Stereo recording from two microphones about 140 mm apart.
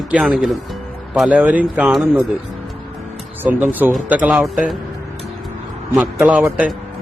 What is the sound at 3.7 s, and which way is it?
Speech, 10° right (ahead or behind).